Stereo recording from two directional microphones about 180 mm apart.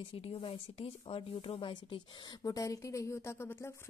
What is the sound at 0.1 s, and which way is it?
Speech, 30° left (ahead or behind).